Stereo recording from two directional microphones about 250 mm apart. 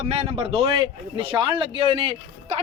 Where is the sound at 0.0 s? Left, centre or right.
Right.